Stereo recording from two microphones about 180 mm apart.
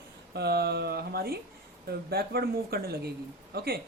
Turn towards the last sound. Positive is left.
turn(degrees=-60)  # may be behind; listen again after turning